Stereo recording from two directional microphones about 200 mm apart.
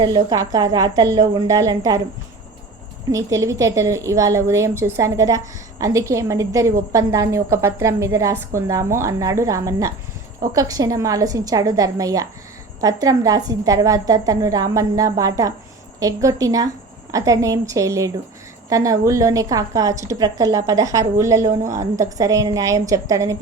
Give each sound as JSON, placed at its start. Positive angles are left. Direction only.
{"t": 0.0, "sound": "a woman's voice", "side_deg": -20}
{"t": 3.1, "sound": "a woman's voice", "side_deg": -15}